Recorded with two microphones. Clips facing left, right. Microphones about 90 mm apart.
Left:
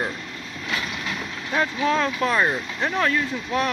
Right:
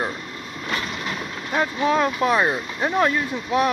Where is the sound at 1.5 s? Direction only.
15° right (ahead or behind).